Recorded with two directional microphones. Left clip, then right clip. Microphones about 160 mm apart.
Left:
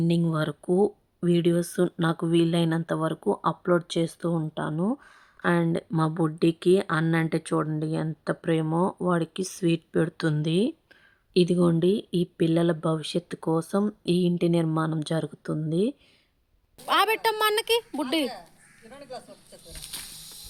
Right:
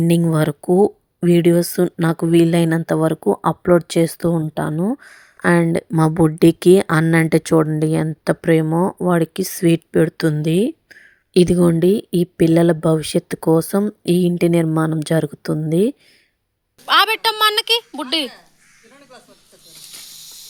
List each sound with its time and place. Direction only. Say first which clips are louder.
0.3 s speech: right 9 dB; 35° right (ahead or behind)
16.8 s a woman's voice: right 8 dB; centre (ahead or behind)